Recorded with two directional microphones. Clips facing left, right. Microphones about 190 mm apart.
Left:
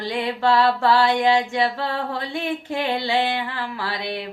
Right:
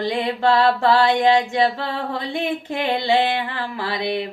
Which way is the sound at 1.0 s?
10° left (ahead or behind).